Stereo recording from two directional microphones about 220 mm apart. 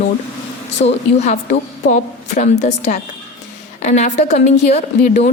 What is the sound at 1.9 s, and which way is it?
Speech, 30° left (ahead or behind).